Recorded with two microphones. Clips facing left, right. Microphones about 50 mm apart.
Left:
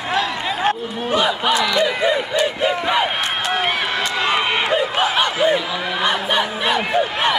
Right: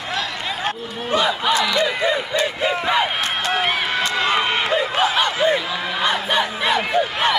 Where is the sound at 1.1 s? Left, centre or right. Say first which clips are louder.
Left 1 dB; left.